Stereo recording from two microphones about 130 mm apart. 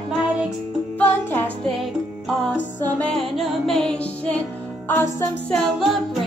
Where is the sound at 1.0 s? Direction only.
15° left (ahead or behind).